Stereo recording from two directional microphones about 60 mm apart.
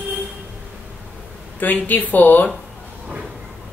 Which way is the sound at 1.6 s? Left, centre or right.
Left.